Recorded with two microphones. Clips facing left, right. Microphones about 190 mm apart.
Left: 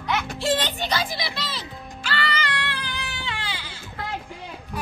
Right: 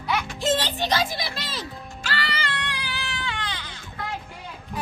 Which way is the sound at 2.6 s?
10° right (ahead or behind).